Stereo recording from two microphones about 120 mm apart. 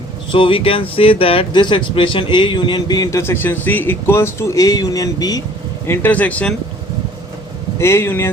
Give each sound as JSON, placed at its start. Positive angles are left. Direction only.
{"t": 0.3, "sound": "speech", "side_deg": 45}
{"t": 5.9, "sound": "speech", "side_deg": 15}
{"t": 7.8, "sound": "speech", "side_deg": 20}